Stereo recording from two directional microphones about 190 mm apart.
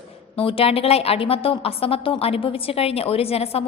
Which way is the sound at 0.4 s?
30° left (ahead or behind).